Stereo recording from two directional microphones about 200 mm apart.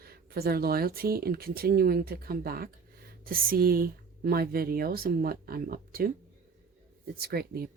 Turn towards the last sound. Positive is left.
turn(degrees=-50)  # may be behind; listen again after turning